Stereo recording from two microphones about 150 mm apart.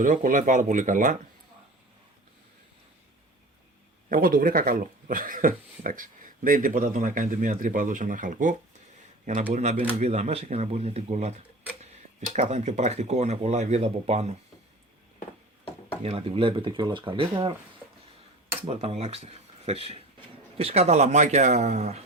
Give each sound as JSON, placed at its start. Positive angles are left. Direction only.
{"t": 0.0, "sound": "speech", "side_deg": -60}
{"t": 4.1, "sound": "speech", "side_deg": -70}
{"t": 16.0, "sound": "speech", "side_deg": -40}
{"t": 18.6, "sound": "speech", "side_deg": -45}